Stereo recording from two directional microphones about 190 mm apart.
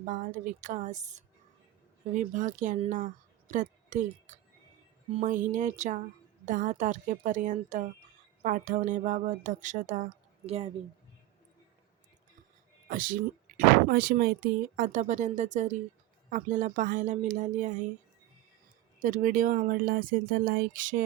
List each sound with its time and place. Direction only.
0.0 s speech: 45° right (ahead or behind)
2.3 s speech: 40° right (ahead or behind)
12.9 s speech: 45° right (ahead or behind)
18.9 s speech: 45° right (ahead or behind)